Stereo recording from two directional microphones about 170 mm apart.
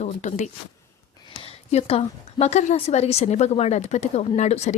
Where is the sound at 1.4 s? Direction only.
35° left (ahead or behind).